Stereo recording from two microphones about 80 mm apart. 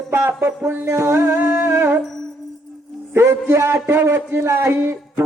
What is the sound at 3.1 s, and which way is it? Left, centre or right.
Music, right.